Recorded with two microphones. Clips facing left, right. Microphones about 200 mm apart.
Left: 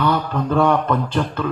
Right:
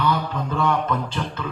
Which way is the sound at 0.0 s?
55° left (ahead or behind).